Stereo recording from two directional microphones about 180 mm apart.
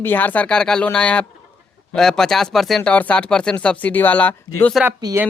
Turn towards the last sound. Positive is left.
turn(degrees=-20)  # may be behind; listen again after turning